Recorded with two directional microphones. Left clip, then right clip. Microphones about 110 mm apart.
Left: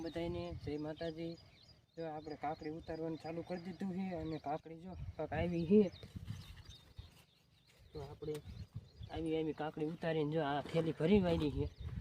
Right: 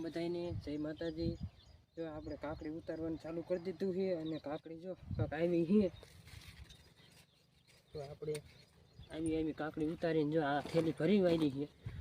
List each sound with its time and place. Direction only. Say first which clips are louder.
0.0 s speech: right 2 dB; 20° left (ahead or behind)
9.0 s speech: right 1 dB; 25° left (ahead or behind)
10.2 s speech: right 2 dB; 10° left (ahead or behind)
10.9 s speech: even; 25° left (ahead or behind)